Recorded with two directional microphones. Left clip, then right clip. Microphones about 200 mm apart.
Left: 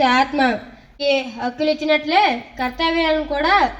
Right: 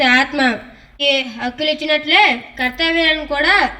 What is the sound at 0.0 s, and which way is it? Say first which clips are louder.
Speech: right 2 dB; 30° right (ahead or behind).